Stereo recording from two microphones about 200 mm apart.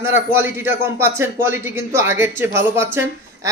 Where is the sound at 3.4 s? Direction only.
15° right (ahead or behind).